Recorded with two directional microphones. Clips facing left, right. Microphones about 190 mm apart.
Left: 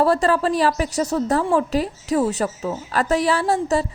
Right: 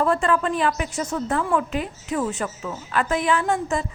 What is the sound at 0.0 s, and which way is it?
A woman's voice, 35° left (ahead or behind).